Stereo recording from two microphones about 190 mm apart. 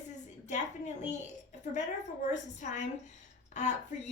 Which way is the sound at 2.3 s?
40° left (ahead or behind).